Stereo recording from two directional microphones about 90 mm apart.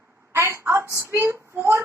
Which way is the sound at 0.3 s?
30° right (ahead or behind).